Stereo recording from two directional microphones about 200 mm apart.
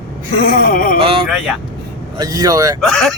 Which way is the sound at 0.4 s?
45° left (ahead or behind).